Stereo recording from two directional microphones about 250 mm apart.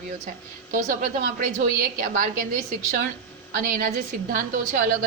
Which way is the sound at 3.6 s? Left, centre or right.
Right.